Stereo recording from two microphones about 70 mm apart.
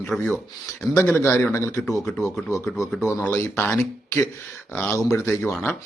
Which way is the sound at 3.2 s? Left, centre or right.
Left.